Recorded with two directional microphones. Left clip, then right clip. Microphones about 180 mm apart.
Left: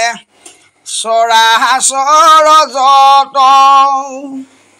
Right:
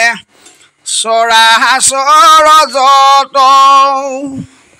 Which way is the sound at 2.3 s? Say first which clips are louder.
Right 1 dB; 50° right (ahead or behind).